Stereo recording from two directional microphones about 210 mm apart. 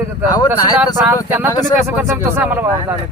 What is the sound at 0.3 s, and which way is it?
Speech, 20° left (ahead or behind).